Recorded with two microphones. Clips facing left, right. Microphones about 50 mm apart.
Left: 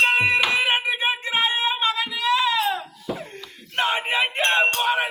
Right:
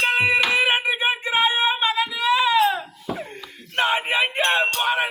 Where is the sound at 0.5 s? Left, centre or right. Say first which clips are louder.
Right 2 dB; centre.